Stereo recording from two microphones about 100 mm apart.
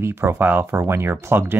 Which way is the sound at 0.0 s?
25° right (ahead or behind).